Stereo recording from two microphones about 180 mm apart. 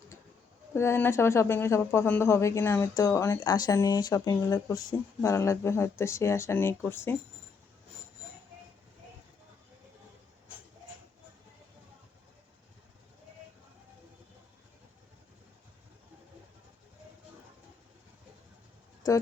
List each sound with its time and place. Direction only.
0.7 s speech: 15° left (ahead or behind)